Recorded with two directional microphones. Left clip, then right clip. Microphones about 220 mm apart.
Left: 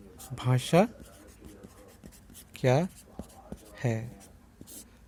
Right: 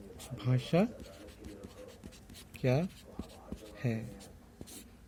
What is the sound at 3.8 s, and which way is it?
Speech, 40° left (ahead or behind).